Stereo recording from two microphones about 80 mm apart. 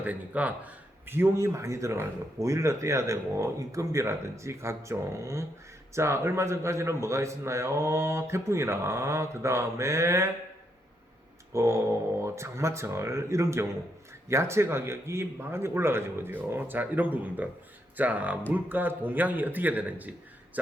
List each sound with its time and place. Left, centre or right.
0.0 s speech: centre; by 10.3 s right
11.5 s a man's voice: right